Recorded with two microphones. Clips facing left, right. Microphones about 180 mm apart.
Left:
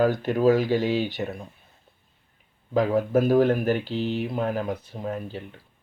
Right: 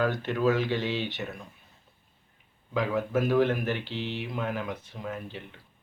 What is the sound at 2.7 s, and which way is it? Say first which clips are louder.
Speech: left 6 dB; 40° left (ahead or behind).